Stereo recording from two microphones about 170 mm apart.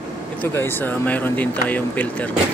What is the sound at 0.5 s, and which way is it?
Speech, 15° left (ahead or behind).